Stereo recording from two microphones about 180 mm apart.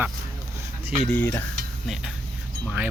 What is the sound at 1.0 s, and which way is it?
Stir, 10° left (ahead or behind).